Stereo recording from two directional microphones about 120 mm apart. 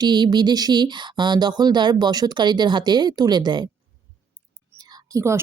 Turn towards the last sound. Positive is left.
turn(degrees=-25)  # may be behind; listen again after turning